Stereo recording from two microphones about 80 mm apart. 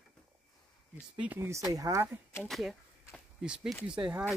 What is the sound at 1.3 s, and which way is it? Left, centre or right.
Speech, right.